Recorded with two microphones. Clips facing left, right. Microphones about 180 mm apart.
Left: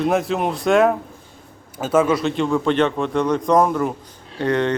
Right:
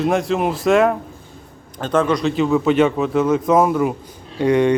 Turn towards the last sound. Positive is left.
turn(degrees=-10)  # may be behind; listen again after turning